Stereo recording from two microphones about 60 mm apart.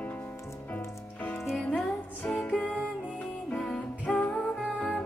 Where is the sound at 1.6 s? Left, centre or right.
Centre.